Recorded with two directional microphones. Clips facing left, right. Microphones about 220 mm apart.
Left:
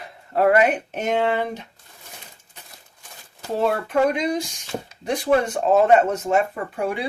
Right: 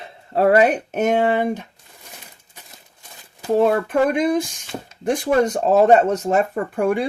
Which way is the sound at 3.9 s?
50° right (ahead or behind).